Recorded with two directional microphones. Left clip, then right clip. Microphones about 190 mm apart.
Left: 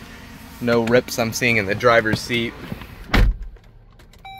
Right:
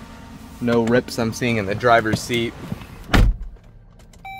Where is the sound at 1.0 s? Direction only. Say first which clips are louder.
Left 3 dB; 10° right (ahead or behind).